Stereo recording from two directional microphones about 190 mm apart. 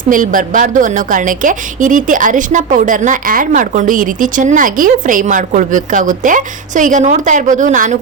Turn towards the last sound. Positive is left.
turn(degrees=-40)  # may be behind; listen again after turning